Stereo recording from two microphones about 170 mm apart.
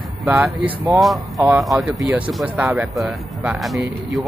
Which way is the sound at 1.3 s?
15° right (ahead or behind).